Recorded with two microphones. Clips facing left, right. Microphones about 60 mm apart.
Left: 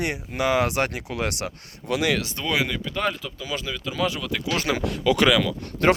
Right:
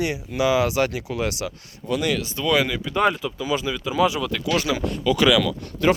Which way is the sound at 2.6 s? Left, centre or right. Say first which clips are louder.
Right 2 dB; centre.